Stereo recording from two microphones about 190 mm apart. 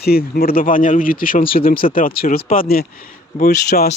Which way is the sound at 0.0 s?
55° left (ahead or behind).